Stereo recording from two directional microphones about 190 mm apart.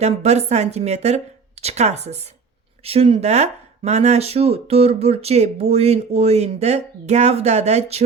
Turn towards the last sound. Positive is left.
turn(degrees=-35)  # may be behind; listen again after turning